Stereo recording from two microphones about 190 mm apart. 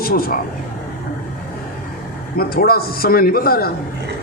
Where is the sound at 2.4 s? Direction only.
50° left (ahead or behind).